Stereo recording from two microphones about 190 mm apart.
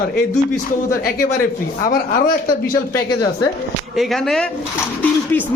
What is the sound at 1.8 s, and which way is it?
Speech, 50° left (ahead or behind).